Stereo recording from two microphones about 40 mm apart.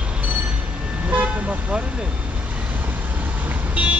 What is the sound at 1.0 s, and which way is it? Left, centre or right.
Toot, right.